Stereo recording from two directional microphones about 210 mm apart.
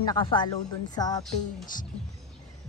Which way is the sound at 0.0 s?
20° left (ahead or behind).